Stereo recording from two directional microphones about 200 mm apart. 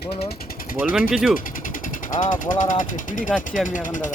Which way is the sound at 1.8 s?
40° left (ahead or behind).